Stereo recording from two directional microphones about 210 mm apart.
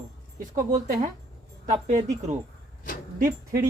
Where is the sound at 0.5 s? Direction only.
35° right (ahead or behind).